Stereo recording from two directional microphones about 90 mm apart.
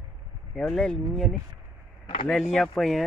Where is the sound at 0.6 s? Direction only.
10° left (ahead or behind).